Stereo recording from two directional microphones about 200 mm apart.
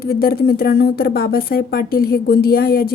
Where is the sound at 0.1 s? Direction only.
50° left (ahead or behind).